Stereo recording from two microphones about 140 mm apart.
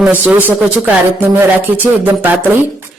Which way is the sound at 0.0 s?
10° right (ahead or behind).